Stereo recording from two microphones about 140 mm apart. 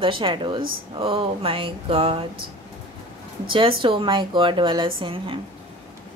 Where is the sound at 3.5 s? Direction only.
40° right (ahead or behind).